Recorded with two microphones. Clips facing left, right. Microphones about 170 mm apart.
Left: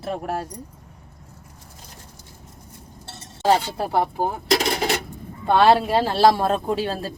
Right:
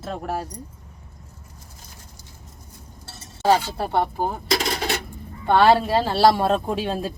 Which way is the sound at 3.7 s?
5° left (ahead or behind).